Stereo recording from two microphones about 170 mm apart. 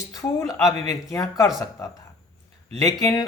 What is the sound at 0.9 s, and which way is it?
Speech, 20° left (ahead or behind).